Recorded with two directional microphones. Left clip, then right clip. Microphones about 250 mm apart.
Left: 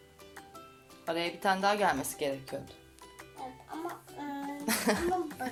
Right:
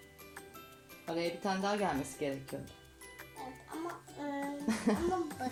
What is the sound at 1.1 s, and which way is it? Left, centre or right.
Speech, left.